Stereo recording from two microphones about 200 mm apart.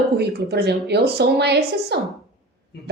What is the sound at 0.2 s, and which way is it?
Speech, 55° right (ahead or behind).